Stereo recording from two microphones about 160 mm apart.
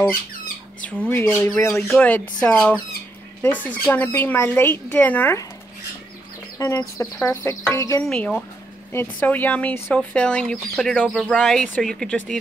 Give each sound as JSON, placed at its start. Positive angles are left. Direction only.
{"t": 0.7, "sound": "speech", "side_deg": 10}
{"t": 6.6, "sound": "speech", "side_deg": 20}
{"t": 8.1, "sound": "speech", "side_deg": 5}